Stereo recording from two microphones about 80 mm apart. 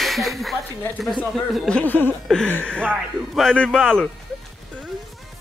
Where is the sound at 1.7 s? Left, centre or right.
Centre.